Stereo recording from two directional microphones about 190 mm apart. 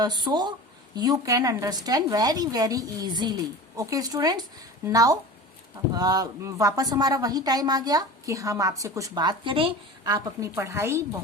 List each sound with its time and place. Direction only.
0.0 s speech: 20° right (ahead or behind)